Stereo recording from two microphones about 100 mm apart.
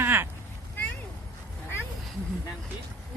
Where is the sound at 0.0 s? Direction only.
20° right (ahead or behind).